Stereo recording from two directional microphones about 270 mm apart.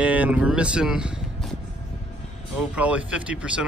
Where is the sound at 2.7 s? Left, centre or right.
Centre.